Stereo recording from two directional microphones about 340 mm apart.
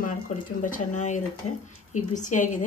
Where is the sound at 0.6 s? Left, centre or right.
Left.